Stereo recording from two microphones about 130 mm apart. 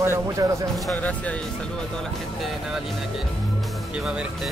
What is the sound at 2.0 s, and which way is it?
Speech, centre (ahead or behind).